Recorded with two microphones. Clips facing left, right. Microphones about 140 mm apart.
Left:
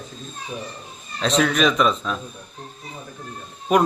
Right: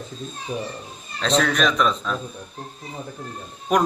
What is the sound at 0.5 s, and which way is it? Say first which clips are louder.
Speech: right 4 dB; 45° right (ahead or behind).